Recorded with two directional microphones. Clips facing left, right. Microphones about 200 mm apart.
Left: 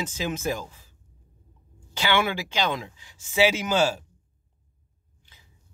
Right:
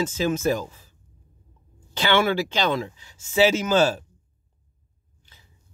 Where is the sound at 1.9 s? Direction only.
10° left (ahead or behind).